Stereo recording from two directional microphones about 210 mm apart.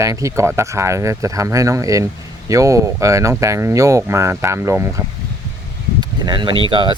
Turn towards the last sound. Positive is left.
turn(degrees=-20)  # may be behind; listen again after turning